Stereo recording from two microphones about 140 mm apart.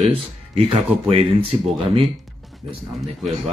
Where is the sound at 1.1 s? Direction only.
45° right (ahead or behind).